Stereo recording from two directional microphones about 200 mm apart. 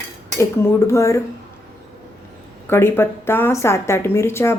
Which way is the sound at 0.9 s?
15° left (ahead or behind).